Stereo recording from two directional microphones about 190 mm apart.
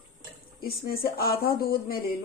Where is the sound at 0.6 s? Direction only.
50° left (ahead or behind).